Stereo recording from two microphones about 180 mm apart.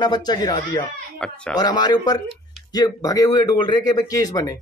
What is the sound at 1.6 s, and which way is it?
Speech, 20° left (ahead or behind).